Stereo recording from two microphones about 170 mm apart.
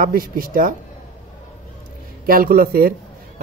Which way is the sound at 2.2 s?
55° right (ahead or behind).